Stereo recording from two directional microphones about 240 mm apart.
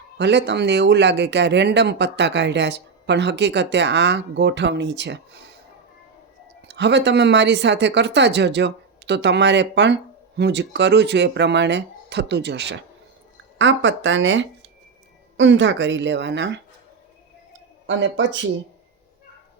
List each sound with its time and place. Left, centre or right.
0.2 s speech: right
6.7 s speech: right
17.8 s speech: right